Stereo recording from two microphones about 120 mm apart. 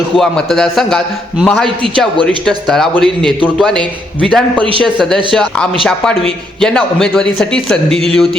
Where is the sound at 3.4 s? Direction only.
10° right (ahead or behind).